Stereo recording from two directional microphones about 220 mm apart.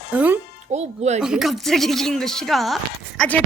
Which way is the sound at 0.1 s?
5° right (ahead or behind).